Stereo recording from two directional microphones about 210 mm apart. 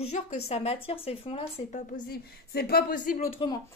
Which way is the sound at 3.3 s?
20° left (ahead or behind).